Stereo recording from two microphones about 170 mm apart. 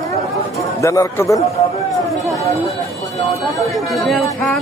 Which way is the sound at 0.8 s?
20° left (ahead or behind).